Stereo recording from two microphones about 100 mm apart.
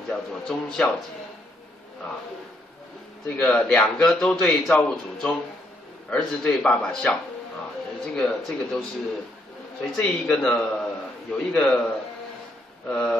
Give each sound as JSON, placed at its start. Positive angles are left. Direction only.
{"t": 0.1, "sound": "speech", "side_deg": 5}
{"t": 3.3, "sound": "a man's voice", "side_deg": 10}
{"t": 9.8, "sound": "a man's voice", "side_deg": 5}